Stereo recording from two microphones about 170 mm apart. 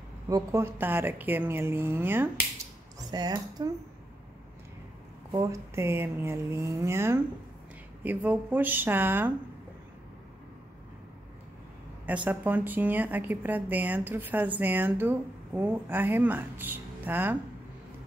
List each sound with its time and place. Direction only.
0.3 s speech: 15° right (ahead or behind)
3.1 s speech: 25° right (ahead or behind)
5.3 s speech: 20° right (ahead or behind)
12.3 s speech: 10° right (ahead or behind)